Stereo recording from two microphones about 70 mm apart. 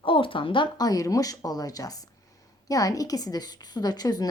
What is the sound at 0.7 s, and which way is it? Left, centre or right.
A woman's voice, left.